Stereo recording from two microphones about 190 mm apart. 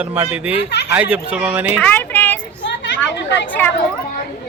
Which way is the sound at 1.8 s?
10° left (ahead or behind).